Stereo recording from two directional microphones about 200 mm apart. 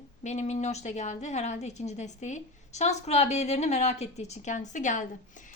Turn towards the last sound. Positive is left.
turn(degrees=40)  # may be behind; listen again after turning